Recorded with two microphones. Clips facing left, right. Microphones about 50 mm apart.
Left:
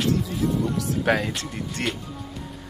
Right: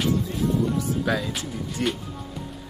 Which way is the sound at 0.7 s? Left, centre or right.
Left.